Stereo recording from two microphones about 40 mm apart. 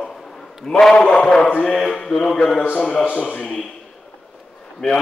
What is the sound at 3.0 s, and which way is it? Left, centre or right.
Speech, left.